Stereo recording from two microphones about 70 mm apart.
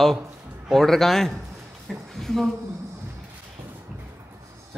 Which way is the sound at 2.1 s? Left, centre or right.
Centre.